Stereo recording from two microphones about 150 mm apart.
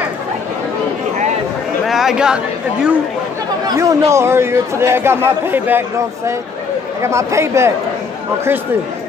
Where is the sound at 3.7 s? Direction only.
20° right (ahead or behind).